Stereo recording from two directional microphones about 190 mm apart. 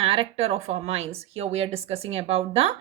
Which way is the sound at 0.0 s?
30° right (ahead or behind).